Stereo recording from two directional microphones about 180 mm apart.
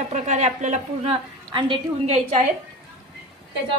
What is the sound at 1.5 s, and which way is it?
Speech, 25° right (ahead or behind).